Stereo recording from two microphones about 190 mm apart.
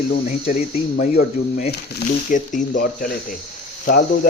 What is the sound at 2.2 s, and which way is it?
Speech, 40° left (ahead or behind).